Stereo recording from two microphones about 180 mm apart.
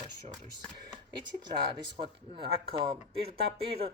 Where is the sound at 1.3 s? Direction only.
25° right (ahead or behind).